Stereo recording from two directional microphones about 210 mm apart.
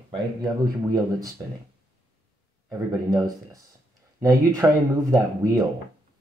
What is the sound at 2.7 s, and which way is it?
Speech, 15° right (ahead or behind).